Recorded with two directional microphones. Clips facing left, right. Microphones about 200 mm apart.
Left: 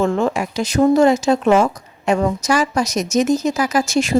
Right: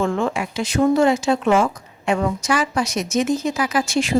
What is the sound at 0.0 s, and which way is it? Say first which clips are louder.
Speech: left 3 dB; 40° left (ahead or behind).